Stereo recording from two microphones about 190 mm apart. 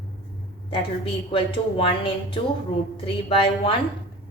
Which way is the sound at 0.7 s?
30° left (ahead or behind).